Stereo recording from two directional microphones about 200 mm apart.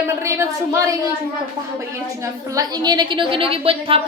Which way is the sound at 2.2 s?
20° right (ahead or behind).